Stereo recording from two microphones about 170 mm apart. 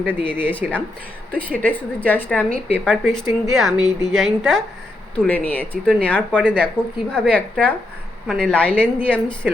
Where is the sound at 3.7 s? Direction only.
25° left (ahead or behind).